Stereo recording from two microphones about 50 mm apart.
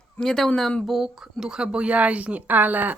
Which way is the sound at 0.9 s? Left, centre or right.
Centre.